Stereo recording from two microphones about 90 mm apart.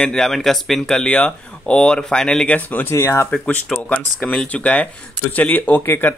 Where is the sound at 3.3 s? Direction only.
15° left (ahead or behind).